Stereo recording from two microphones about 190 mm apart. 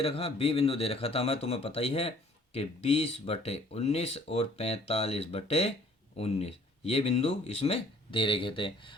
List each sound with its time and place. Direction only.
0.0 s speech: 30° left (ahead or behind)